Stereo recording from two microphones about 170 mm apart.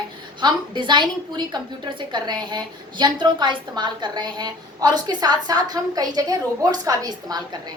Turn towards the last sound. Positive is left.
turn(degrees=-25)  # may be behind; listen again after turning